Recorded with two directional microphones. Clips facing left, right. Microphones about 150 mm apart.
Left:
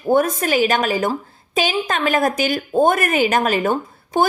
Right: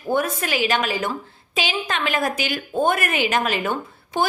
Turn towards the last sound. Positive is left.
turn(degrees=45)  # may be behind; listen again after turning